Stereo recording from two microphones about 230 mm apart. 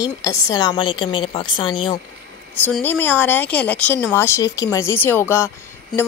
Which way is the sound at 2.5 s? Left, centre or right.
Centre.